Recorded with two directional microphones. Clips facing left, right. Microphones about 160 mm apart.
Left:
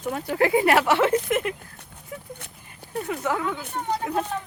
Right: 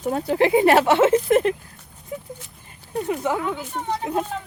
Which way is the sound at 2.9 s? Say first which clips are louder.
Right 3 dB; 20° right (ahead or behind).